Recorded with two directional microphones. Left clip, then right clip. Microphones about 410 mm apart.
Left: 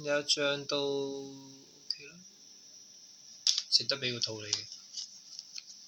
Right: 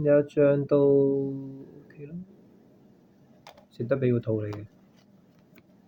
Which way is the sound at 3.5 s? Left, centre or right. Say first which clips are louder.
Left 1 dB; right.